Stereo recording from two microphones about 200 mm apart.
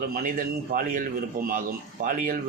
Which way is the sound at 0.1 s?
45° right (ahead or behind).